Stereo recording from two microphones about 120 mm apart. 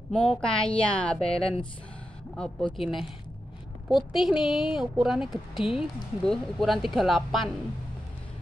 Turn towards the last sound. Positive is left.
turn(degrees=0)  # may be behind; listen again after turning